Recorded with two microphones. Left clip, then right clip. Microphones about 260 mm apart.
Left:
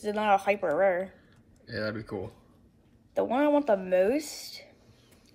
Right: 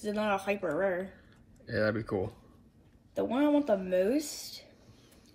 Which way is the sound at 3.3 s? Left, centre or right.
Centre.